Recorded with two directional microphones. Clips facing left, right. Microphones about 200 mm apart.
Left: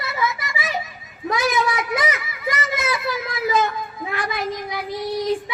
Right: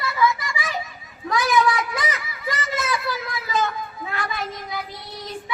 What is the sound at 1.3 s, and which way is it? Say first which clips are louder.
Speech: right 1 dB; 20° left (ahead or behind).